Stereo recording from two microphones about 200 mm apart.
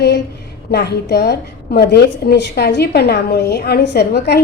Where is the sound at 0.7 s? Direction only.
55° left (ahead or behind).